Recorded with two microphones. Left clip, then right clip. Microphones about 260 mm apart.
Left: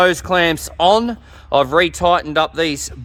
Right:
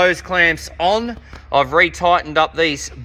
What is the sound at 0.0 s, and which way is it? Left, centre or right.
Speech, left.